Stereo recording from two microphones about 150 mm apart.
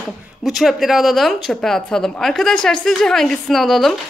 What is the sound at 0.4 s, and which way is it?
Speech, centre (ahead or behind).